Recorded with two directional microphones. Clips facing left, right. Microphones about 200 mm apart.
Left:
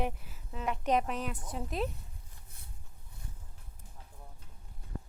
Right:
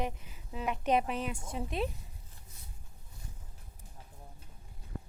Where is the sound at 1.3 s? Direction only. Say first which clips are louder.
Right 1 dB; 25° right (ahead or behind).